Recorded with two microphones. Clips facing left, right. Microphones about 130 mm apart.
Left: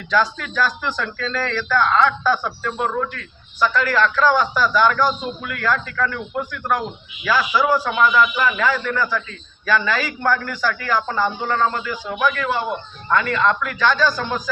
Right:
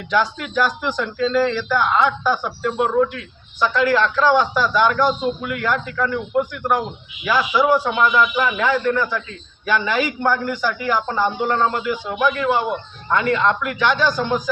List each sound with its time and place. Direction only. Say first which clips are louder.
0.1 s a man's voice: even; 20° right (ahead or behind)